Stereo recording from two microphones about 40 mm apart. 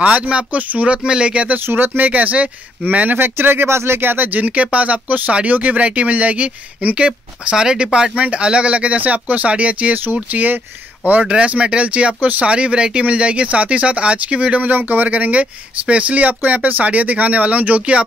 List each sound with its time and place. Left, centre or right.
0.0 s speech: right
1.0 s speech: right
1.7 s speech: right
2.0 s speech: right
3.2 s speech: right
4.5 s speech: right
7.1 s speech: centre
8.2 s speech: right
10.3 s speech: right
11.1 s speech: right
14.7 s speech: right